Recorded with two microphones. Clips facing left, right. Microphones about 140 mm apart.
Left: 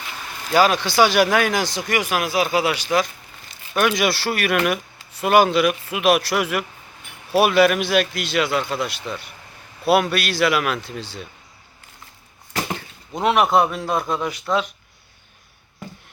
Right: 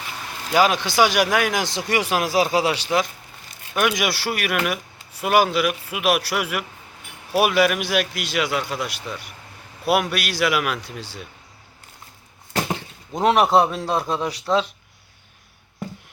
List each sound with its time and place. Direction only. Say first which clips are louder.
0.5 s speech: left 1 dB; 15° right (ahead or behind)
1.9 s a man's voice: right 2 dB; 30° right (ahead or behind)
3.8 s speech: left 2 dB; 10° right (ahead or behind)
13.2 s a man's voice: right 1 dB; 35° right (ahead or behind)